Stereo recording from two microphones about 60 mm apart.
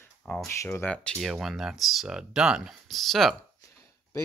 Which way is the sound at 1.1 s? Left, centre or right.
Centre.